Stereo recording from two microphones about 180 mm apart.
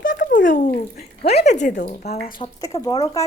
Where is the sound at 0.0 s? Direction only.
50° left (ahead or behind).